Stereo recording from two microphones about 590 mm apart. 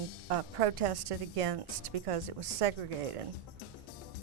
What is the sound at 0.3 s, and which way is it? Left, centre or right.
A woman's voice, right.